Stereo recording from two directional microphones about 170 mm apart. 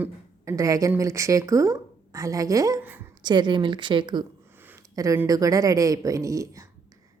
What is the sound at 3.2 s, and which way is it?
A woman's voice, 25° right (ahead or behind).